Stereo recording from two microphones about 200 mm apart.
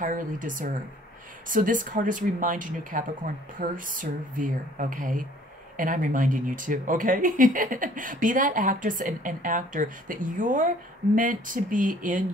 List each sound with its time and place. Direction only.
0.0 s speech: 40° right (ahead or behind)